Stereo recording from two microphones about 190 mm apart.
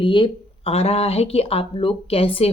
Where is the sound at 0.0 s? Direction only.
25° left (ahead or behind).